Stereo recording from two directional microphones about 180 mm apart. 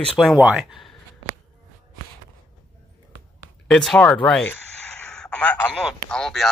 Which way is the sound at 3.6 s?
5° left (ahead or behind).